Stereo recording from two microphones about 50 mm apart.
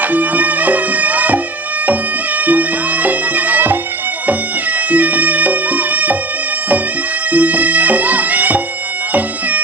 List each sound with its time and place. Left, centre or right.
0.0 s bagpipes: right
4.3 s music: right
7.2 s bagpipes: right